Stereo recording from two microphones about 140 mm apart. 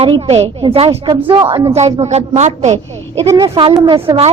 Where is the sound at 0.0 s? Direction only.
45° right (ahead or behind).